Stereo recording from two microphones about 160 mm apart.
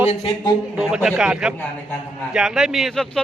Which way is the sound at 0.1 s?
35° left (ahead or behind).